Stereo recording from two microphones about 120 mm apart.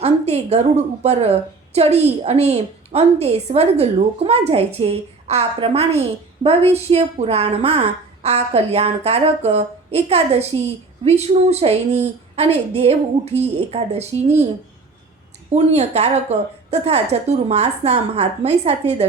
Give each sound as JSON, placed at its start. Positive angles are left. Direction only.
{"t": 0.0, "sound": "a woman's voice", "side_deg": -60}
{"t": 15.4, "sound": "a woman's voice", "side_deg": -65}